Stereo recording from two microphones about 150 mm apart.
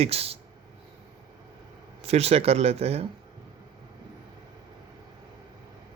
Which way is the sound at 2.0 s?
45° right (ahead or behind).